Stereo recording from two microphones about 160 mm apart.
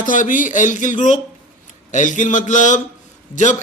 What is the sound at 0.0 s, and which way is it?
A man's voice, 55° left (ahead or behind).